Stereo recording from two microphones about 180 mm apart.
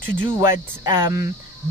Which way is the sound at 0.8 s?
20° right (ahead or behind).